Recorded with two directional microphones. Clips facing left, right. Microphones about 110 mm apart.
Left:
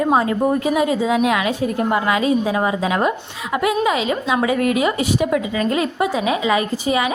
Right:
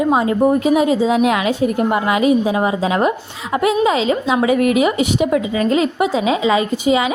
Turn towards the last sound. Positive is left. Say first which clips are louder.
# right 3 dB
turn(degrees=-20)  # may be behind; listen again after turning